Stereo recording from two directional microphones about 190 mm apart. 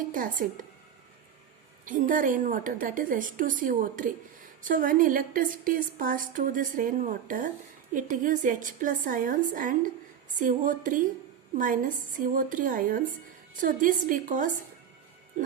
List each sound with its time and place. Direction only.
0.1 s a woman's voice: 45° right (ahead or behind)
1.8 s a woman's voice: 45° right (ahead or behind)
15.3 s music: 40° right (ahead or behind)